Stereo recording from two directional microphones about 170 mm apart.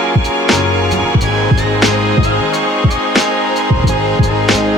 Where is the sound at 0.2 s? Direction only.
Centre (ahead or behind).